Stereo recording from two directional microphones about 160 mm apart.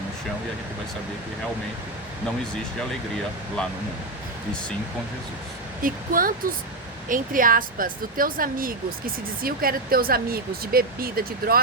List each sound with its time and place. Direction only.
5.8 s speech: 60° right (ahead or behind)